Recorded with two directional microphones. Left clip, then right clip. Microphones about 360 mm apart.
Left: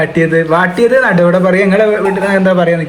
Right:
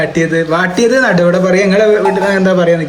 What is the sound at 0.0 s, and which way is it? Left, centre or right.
A man's voice, centre.